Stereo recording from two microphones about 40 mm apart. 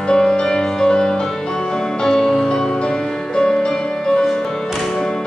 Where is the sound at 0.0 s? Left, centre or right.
Centre.